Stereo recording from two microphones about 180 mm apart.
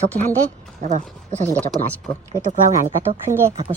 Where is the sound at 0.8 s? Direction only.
45° right (ahead or behind).